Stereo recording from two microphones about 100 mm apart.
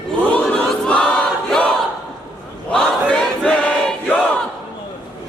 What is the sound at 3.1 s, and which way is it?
Crowd, 10° left (ahead or behind).